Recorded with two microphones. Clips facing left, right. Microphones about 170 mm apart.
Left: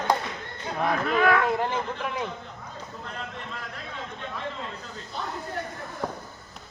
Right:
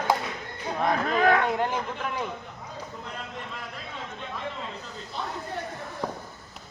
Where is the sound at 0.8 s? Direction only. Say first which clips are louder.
Even; 40° right (ahead or behind).